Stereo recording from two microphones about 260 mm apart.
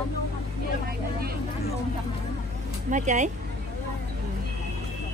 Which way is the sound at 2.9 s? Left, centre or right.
Right.